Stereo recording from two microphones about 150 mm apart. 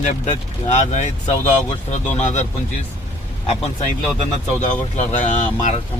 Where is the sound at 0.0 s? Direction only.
50° left (ahead or behind).